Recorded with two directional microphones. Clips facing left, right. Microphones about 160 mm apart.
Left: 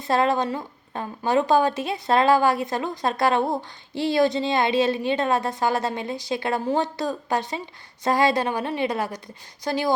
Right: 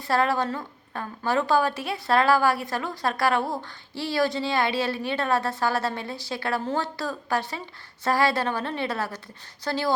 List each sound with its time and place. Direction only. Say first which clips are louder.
0.0 s a woman's voice: left 2 dB; 20° left (ahead or behind)